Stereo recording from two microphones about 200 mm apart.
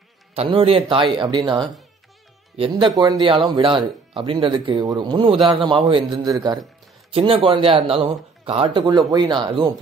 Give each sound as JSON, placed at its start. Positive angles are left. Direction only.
{"t": 0.3, "sound": "speech", "side_deg": -30}